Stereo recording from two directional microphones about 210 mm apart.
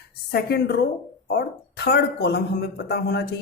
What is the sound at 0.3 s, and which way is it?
Speech, 50° left (ahead or behind).